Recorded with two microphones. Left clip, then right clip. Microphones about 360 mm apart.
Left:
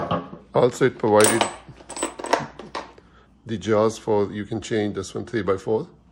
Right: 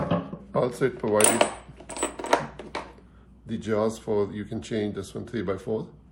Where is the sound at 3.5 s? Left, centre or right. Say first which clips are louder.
Left 6 dB; left.